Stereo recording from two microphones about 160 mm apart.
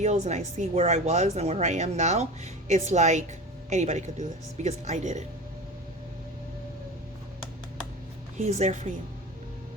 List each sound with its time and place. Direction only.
0.0 s speech: 45° right (ahead or behind)
8.4 s speech: 45° right (ahead or behind)